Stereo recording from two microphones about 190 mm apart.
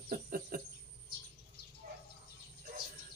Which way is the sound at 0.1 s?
50° right (ahead or behind).